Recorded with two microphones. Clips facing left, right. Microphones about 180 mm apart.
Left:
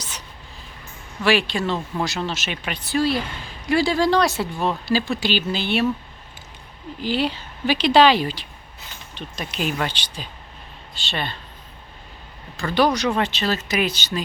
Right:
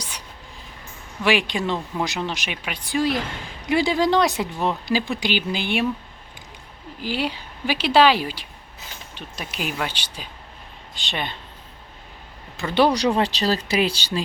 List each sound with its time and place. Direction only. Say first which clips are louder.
1.2 s a woman's voice: left 1 dB; 15° right (ahead or behind)
7.0 s a woman's voice: left 3 dB; 10° right (ahead or behind)
12.5 s speech: right 1 dB; 25° right (ahead or behind)